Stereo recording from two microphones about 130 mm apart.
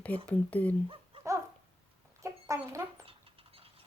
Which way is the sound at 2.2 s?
25° right (ahead or behind).